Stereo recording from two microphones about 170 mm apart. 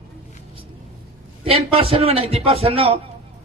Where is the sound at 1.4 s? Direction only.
35° right (ahead or behind).